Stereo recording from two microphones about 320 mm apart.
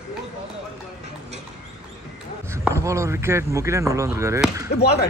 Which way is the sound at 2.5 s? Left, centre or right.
Centre.